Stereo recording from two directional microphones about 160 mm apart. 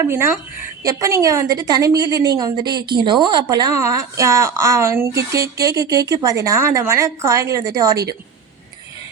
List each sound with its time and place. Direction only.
0.0 s a woman's voice: 15° right (ahead or behind)